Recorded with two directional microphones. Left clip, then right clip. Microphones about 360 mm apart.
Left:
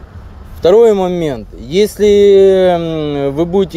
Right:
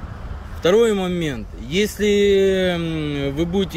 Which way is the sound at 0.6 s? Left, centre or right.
Centre.